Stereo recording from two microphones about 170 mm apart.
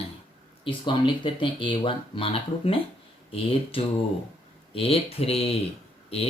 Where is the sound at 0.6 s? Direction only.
30° left (ahead or behind).